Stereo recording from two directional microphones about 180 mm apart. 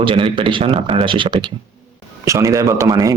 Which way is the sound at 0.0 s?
30° right (ahead or behind).